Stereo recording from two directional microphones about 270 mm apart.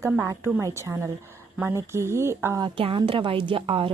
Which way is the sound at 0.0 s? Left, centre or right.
Centre.